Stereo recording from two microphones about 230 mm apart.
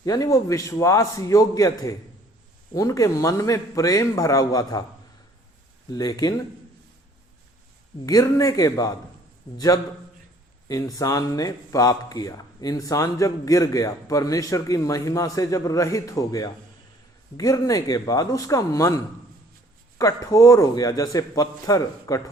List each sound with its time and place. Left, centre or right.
0.0 s speech: centre
6.0 s speech: centre
8.0 s speech: centre
20.0 s speech: centre